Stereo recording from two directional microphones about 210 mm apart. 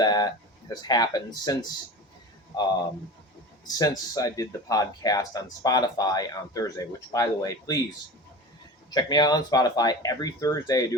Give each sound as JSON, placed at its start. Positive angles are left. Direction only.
{"t": 0.0, "sound": "speech", "side_deg": 20}
{"t": 3.8, "sound": "speech", "side_deg": 15}
{"t": 8.9, "sound": "speech", "side_deg": 20}